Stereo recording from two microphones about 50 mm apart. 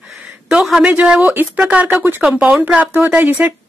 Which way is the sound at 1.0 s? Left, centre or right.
Centre.